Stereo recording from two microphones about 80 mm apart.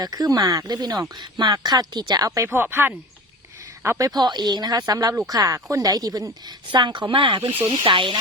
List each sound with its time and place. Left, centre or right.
0.0 s speech: right
1.5 s speech: right
2.5 s speech: right
3.8 s speech: right
5.5 s a woman's voice: right